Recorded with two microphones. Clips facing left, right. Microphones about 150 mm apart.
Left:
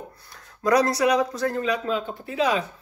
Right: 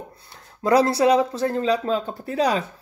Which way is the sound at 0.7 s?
30° right (ahead or behind).